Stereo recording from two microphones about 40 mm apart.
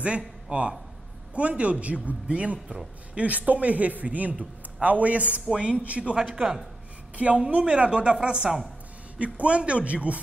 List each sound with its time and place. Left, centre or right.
0.0 s a man's voice: right
5.5 s speech: right
6.3 s speech: centre
7.3 s a woman's voice: right